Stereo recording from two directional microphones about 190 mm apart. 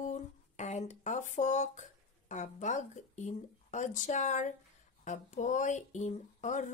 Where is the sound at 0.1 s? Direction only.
35° left (ahead or behind).